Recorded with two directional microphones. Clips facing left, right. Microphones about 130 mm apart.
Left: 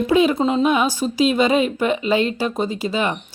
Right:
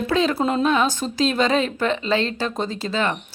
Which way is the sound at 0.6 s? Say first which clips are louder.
Left 2 dB; 15° left (ahead or behind).